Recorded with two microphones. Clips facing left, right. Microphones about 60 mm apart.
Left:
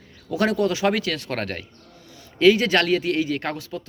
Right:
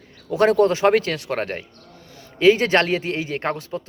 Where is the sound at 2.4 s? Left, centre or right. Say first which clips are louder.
Right 1 dB; right.